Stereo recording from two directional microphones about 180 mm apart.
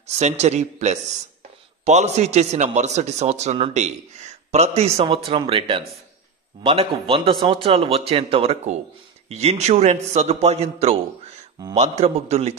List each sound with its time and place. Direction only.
0.0 s speech: 35° right (ahead or behind)